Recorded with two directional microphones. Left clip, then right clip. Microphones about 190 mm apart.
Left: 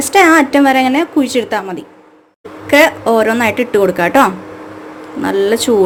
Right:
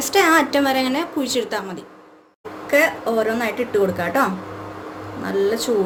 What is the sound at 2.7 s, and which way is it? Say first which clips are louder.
Speech: left 8 dB; 55° left (ahead or behind).